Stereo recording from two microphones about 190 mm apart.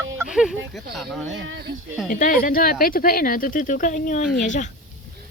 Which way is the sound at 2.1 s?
45° left (ahead or behind).